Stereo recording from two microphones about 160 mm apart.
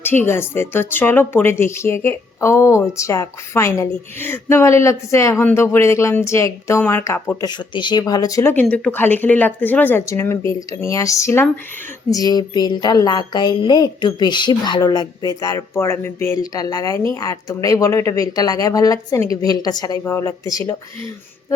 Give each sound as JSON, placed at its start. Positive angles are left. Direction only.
{"t": 0.3, "sound": "speech", "side_deg": 15}
{"t": 7.7, "sound": "speech", "side_deg": 30}